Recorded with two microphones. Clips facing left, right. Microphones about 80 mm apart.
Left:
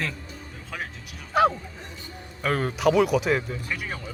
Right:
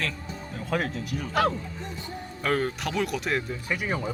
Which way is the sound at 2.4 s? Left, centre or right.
Centre.